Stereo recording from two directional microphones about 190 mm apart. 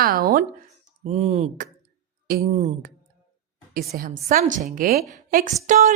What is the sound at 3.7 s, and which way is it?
A woman's voice, 50° right (ahead or behind).